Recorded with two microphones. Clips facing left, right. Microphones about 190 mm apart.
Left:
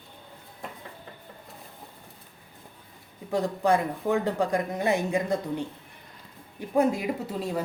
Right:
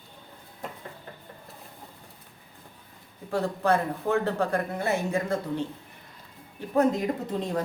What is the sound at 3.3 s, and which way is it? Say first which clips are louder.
A woman's voice: left 1 dB; 15° left (ahead or behind).